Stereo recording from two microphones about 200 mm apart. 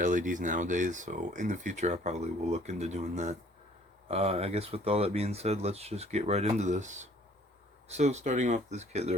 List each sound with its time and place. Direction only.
0.0 s speech: 40° right (ahead or behind)